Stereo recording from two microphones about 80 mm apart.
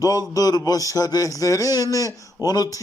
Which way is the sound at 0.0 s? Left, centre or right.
Left.